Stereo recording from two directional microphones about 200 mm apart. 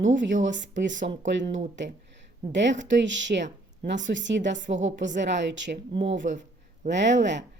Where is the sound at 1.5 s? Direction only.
65° right (ahead or behind).